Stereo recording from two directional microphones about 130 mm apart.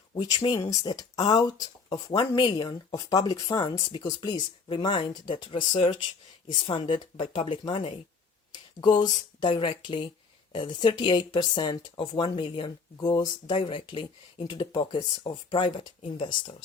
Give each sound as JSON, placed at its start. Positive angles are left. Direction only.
{"t": 0.2, "sound": "speech", "side_deg": 30}
{"t": 13.5, "sound": "speech", "side_deg": 45}